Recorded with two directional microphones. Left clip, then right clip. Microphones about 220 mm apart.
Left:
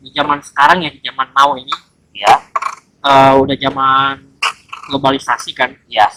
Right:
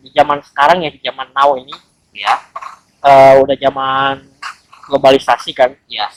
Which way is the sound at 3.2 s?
15° left (ahead or behind).